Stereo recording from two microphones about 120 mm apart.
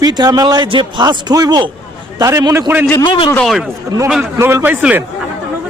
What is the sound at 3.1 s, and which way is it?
Speech, 40° left (ahead or behind).